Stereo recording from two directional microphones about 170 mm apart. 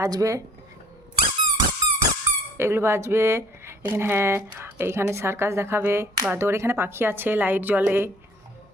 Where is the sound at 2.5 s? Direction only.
15° right (ahead or behind).